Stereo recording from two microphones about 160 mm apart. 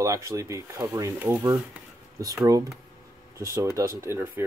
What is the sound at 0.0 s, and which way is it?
Speech, 20° right (ahead or behind).